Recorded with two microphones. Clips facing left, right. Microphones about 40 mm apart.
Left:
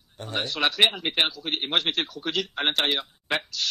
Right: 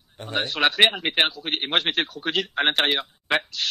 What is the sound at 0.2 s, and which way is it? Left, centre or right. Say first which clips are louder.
A man's voice: right 3 dB; right.